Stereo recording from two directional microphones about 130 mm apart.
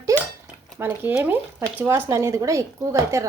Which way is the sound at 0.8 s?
15° right (ahead or behind).